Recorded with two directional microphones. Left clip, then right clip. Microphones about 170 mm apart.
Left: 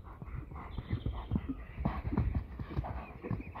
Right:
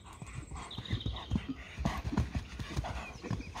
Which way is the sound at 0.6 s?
20° right (ahead or behind).